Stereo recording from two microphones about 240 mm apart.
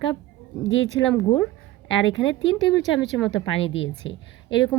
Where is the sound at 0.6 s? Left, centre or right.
Left.